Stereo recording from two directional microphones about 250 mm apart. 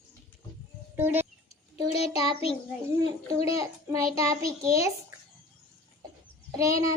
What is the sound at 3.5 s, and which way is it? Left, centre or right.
Speech, centre.